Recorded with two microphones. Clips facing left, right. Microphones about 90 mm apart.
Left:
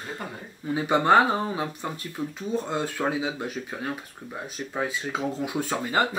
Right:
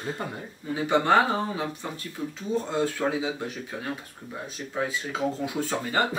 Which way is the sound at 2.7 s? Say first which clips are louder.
Right 2 dB; 20° left (ahead or behind).